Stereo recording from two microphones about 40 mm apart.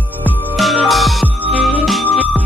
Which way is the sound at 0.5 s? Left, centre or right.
Centre.